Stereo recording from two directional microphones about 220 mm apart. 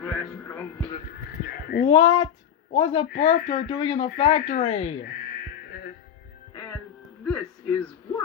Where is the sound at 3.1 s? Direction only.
35° left (ahead or behind).